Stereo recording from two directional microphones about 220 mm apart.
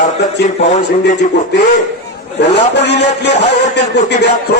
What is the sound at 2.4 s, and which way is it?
A man's voice, 50° left (ahead or behind).